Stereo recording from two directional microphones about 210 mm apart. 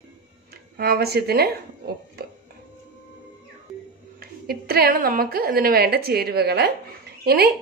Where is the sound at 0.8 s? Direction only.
50° right (ahead or behind).